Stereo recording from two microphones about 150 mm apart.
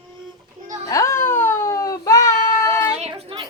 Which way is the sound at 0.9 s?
20° left (ahead or behind).